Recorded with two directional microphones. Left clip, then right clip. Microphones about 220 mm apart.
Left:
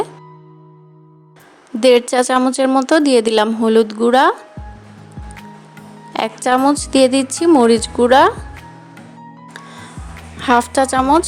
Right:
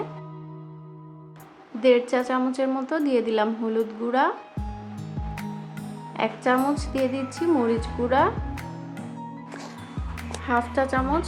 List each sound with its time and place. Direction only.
1.8 s a woman's voice: 45° left (ahead or behind)
6.1 s a woman's voice: 45° left (ahead or behind)
10.4 s a woman's voice: 40° left (ahead or behind)